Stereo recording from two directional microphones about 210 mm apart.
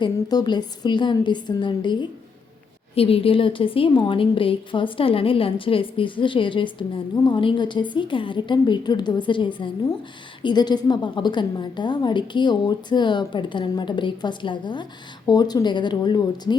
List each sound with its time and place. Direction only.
0.0 s a woman's voice: 20° left (ahead or behind)